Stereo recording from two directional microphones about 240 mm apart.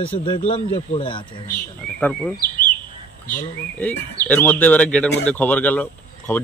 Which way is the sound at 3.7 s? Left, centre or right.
Centre.